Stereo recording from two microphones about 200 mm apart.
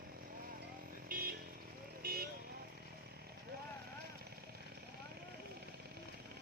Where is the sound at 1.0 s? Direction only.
45° right (ahead or behind).